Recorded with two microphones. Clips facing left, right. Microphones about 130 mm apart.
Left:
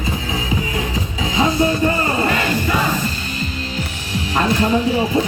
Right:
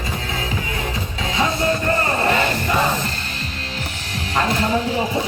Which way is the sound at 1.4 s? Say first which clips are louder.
Left 4 dB; 5° left (ahead or behind).